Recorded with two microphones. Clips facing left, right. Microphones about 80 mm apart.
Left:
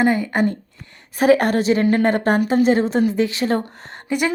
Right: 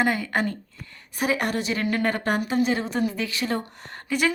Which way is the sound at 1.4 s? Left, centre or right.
Left.